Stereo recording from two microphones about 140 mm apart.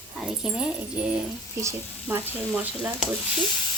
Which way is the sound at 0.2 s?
5° right (ahead or behind).